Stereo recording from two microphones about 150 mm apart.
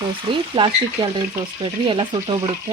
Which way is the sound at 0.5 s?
35° right (ahead or behind).